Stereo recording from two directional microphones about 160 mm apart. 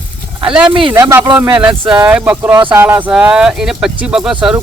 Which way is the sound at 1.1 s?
15° right (ahead or behind).